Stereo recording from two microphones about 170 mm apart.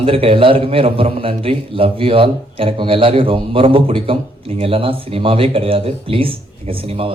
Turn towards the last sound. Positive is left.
turn(degrees=-35)  # may be behind; listen again after turning